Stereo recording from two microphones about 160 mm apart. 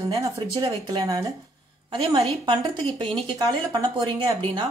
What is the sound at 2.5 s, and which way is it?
A woman's voice, 30° right (ahead or behind).